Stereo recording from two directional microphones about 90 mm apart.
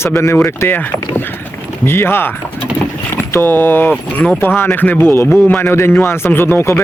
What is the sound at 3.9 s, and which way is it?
Speech, 15° left (ahead or behind).